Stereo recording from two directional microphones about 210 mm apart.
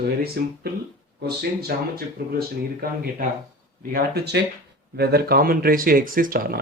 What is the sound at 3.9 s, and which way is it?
Speech, 50° right (ahead or behind).